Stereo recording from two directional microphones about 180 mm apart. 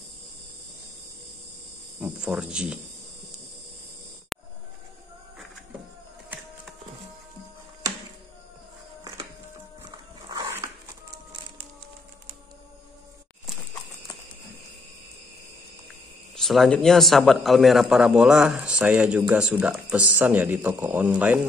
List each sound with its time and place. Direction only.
2.0 s a man's voice: 5° right (ahead or behind)
4.3 s a sound: centre (ahead or behind)
9.8 s dog: 20° right (ahead or behind)
16.3 s a man's voice: centre (ahead or behind)